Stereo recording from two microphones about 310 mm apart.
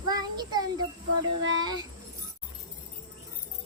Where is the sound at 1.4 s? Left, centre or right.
Right.